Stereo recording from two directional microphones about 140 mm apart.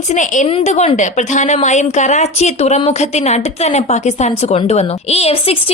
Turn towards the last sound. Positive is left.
turn(degrees=45)  # may be behind; listen again after turning